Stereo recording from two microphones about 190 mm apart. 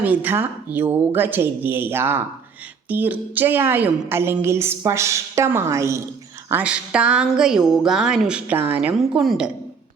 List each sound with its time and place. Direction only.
0.0 s a woman's voice: 10° right (ahead or behind)